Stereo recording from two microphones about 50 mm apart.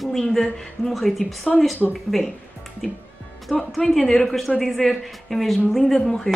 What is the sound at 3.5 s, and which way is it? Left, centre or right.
A woman's voice, centre.